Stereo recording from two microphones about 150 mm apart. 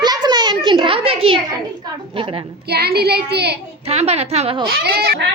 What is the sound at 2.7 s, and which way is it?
Speech, 90° right.